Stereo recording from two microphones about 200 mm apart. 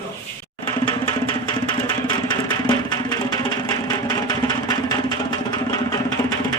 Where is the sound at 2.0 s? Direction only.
20° left (ahead or behind).